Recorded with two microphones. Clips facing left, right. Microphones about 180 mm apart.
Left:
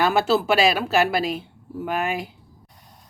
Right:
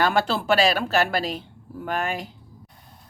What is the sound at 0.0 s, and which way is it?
Speech, 5° left (ahead or behind).